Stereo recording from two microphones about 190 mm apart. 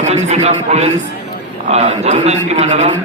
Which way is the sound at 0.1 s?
35° right (ahead or behind).